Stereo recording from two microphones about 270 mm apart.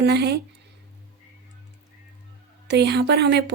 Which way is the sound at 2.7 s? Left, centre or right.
Right.